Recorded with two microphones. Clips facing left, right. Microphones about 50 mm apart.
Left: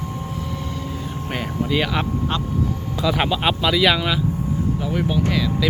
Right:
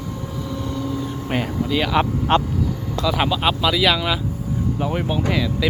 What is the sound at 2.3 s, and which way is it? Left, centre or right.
Speech, right.